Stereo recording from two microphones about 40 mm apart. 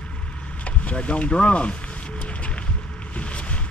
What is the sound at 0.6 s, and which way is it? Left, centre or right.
Speech, left.